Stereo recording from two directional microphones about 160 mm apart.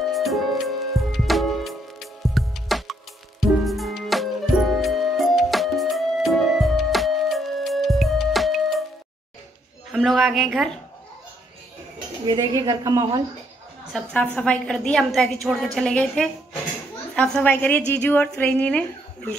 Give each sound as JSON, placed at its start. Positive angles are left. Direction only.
{"t": 0.0, "sound": "music", "side_deg": 0}
{"t": 9.8, "sound": "a woman's voice", "side_deg": 0}
{"t": 12.3, "sound": "a woman's voice", "side_deg": -25}
{"t": 13.9, "sound": "a woman's voice", "side_deg": 5}